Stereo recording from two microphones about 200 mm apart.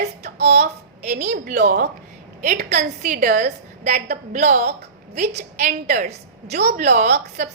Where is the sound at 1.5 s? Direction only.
55° right (ahead or behind).